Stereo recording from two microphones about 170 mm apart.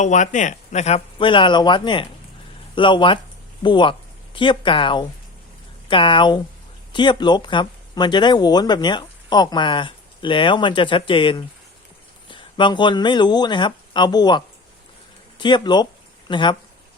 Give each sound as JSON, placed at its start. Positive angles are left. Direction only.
{"t": 0.0, "sound": "speech", "side_deg": 45}